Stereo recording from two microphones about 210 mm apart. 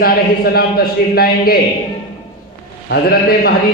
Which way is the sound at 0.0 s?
45° left (ahead or behind).